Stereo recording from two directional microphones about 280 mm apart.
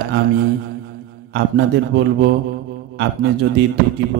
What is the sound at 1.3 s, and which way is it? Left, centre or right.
A man's voice, right.